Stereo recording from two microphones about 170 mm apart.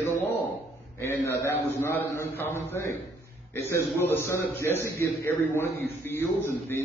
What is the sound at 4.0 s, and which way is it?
Speech, 15° left (ahead or behind).